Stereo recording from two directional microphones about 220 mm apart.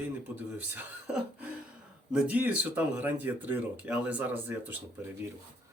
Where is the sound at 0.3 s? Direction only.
10° right (ahead or behind).